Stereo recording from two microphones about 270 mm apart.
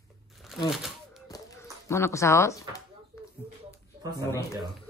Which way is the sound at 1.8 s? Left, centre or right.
Centre.